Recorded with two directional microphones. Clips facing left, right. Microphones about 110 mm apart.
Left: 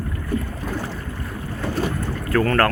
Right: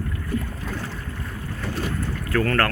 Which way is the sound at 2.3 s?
40° left (ahead or behind).